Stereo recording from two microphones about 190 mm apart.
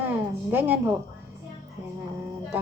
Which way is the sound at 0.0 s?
10° right (ahead or behind).